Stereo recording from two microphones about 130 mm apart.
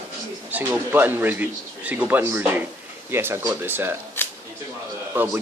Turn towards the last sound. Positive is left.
turn(degrees=-15)  # may be behind; listen again after turning